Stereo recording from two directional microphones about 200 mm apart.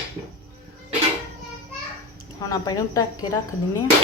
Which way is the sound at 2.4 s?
15° left (ahead or behind).